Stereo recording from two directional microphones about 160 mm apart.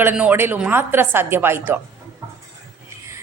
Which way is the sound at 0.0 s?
10° right (ahead or behind).